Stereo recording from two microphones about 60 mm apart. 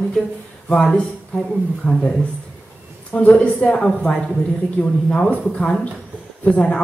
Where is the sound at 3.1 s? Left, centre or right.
Left.